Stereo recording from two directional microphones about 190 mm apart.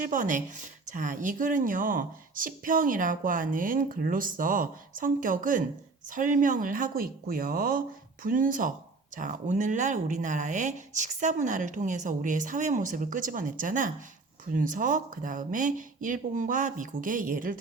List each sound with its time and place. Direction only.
0.0 s speech: 45° right (ahead or behind)